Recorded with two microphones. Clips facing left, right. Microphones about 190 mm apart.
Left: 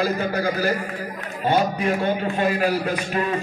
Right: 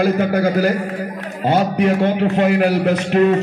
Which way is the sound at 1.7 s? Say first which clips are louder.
Right 6 dB; 80° right.